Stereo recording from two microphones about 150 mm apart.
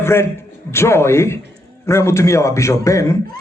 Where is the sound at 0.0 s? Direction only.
15° left (ahead or behind).